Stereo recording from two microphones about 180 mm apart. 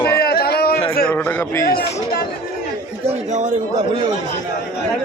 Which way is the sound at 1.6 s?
55° left (ahead or behind).